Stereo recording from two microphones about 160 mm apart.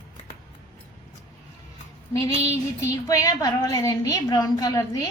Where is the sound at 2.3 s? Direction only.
40° right (ahead or behind).